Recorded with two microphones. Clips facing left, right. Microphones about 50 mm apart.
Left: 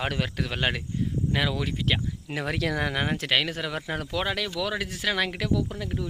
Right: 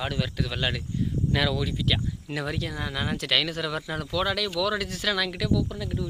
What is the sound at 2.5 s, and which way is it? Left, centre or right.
Speech, left.